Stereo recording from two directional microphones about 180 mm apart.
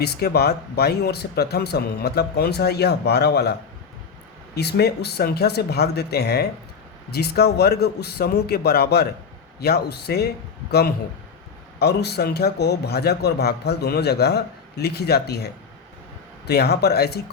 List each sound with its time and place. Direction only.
0.0 s a man's voice: 60° left (ahead or behind)
4.5 s a man's voice: 65° left (ahead or behind)